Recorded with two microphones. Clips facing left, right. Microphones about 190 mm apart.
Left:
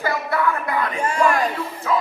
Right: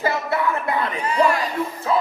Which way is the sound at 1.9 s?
30° right (ahead or behind).